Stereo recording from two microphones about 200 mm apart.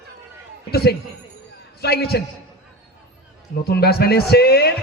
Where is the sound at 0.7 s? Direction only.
55° left (ahead or behind).